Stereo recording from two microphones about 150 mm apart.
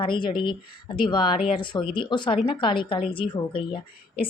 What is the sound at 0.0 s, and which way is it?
A woman's voice, 35° left (ahead or behind).